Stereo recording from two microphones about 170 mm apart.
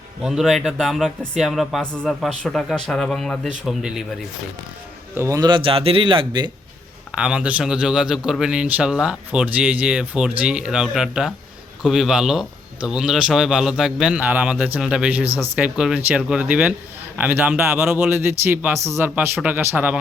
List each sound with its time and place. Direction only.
0.2 s a man's voice: centre (ahead or behind)
5.1 s speech: 15° right (ahead or behind)
7.2 s a man's voice: 5° right (ahead or behind)